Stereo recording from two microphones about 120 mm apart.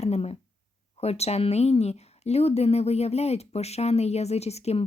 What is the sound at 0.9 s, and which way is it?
Speech, 60° left (ahead or behind).